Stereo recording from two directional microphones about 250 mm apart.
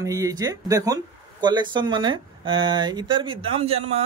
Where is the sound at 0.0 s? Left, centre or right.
Centre.